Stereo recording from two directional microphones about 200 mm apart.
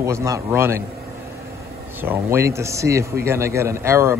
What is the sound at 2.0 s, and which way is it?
A man's voice, 10° right (ahead or behind).